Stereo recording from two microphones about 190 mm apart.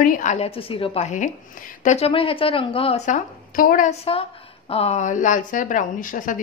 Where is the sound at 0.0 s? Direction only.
45° left (ahead or behind).